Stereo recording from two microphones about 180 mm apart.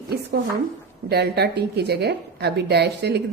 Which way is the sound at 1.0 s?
65° right (ahead or behind).